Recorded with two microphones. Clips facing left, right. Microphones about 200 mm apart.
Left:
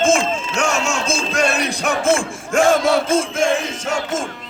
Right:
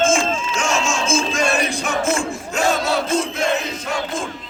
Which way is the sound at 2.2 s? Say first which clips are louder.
Left 4 dB; 50° left (ahead or behind).